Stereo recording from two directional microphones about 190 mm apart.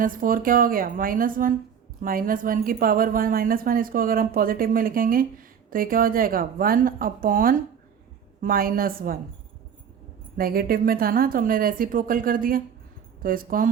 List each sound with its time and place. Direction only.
0.0 s a woman's voice: 45° right (ahead or behind)
10.3 s a woman's voice: 50° right (ahead or behind)